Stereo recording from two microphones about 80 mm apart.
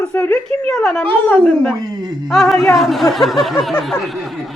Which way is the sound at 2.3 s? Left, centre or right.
Centre.